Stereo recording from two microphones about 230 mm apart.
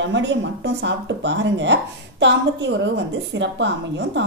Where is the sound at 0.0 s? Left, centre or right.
Right.